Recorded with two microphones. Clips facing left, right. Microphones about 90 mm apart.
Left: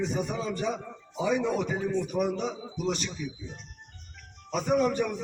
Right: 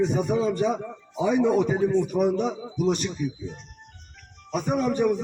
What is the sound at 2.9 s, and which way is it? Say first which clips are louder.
Speech: right 6 dB; 40° right (ahead or behind).